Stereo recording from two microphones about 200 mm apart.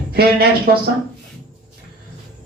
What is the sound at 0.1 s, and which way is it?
Speech, 50° right (ahead or behind).